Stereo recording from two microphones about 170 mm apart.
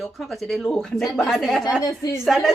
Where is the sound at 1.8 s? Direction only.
20° left (ahead or behind).